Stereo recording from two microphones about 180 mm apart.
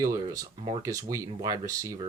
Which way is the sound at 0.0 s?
20° right (ahead or behind).